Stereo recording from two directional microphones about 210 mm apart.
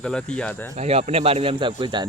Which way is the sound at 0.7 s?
30° right (ahead or behind).